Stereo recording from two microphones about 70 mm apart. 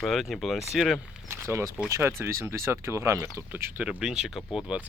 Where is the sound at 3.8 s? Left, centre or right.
Centre.